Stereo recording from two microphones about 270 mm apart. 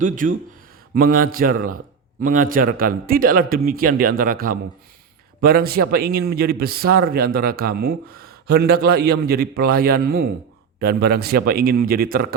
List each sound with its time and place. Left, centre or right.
0.0 s a man's voice: right